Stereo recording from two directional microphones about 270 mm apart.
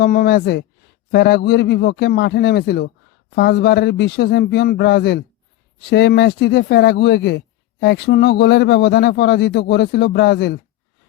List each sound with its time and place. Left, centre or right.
0.0 s speech: left